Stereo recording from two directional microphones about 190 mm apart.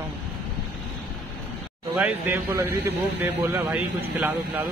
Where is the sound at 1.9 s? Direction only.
10° right (ahead or behind).